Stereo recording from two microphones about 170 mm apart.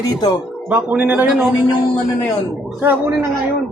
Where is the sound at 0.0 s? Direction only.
25° left (ahead or behind).